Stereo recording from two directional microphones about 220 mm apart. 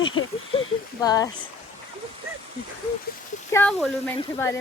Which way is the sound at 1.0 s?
15° left (ahead or behind).